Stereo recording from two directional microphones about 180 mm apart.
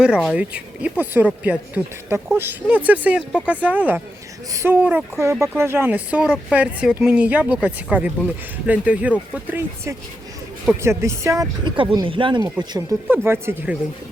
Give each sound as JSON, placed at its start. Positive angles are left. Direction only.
{"t": 0.0, "sound": "speech", "side_deg": 0}